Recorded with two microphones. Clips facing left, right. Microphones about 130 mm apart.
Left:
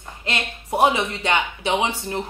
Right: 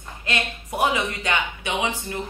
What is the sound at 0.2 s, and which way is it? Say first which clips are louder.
A woman's voice: right 1 dB; 25° left (ahead or behind).